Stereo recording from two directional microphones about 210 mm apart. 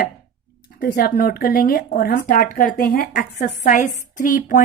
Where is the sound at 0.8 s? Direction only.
45° left (ahead or behind).